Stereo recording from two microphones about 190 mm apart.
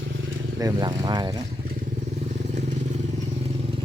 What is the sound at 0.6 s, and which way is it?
Speech, 20° right (ahead or behind).